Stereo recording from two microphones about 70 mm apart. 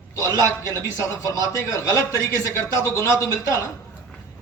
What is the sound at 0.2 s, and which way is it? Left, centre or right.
A man's voice, left.